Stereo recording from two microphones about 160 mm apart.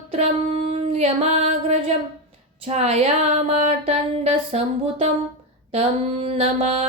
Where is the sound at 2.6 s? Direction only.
40° right (ahead or behind).